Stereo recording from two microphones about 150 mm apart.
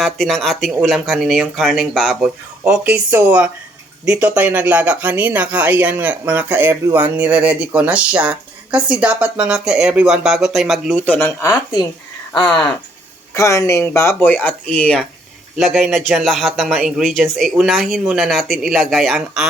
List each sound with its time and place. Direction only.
0.0 s speech: centre (ahead or behind); by 11.8 s 20° left (ahead or behind)
12.4 s speech: centre (ahead or behind)
13.3 s speech: 20° left (ahead or behind); by 19.5 s centre (ahead or behind)